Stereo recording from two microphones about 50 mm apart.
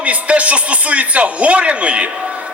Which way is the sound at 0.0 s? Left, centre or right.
Right.